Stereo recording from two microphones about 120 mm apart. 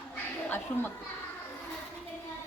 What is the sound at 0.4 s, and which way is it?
Speech, 15° left (ahead or behind).